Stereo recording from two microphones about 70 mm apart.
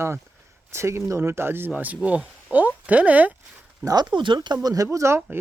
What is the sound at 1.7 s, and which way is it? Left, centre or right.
Speech, right.